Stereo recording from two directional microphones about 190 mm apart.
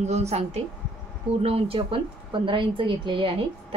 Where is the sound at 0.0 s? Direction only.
35° right (ahead or behind).